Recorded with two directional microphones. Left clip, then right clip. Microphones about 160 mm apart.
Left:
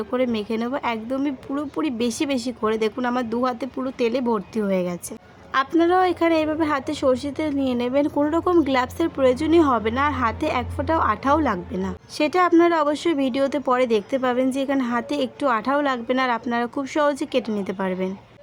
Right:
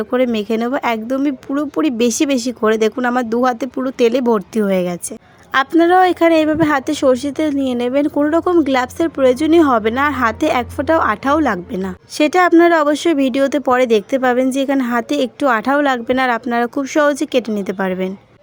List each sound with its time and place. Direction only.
0.0 s a woman's voice: 40° right (ahead or behind)